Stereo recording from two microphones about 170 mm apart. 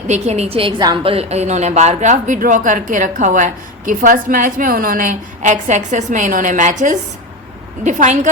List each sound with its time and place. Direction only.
0.1 s a woman's voice: 40° right (ahead or behind)